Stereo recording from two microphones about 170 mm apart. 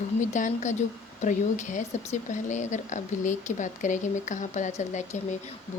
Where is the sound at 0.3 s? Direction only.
45° left (ahead or behind).